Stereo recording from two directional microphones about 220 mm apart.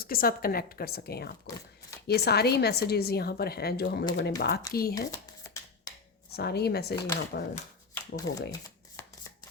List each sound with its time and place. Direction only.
0.0 s a woman's voice: 40° left (ahead or behind)
4.9 s a sound: 15° left (ahead or behind)
6.3 s a woman's voice: 45° left (ahead or behind)
7.9 s speech: 15° left (ahead or behind)